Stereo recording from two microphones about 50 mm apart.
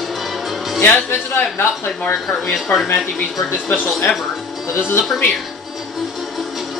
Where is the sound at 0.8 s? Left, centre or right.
Left.